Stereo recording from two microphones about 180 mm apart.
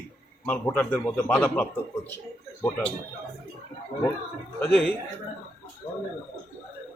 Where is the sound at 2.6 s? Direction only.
5° left (ahead or behind).